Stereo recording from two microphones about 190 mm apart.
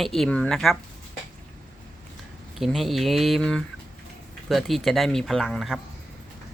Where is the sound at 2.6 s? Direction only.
Centre (ahead or behind).